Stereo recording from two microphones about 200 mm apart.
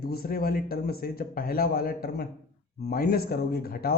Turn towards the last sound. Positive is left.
turn(degrees=50)  # may be behind; listen again after turning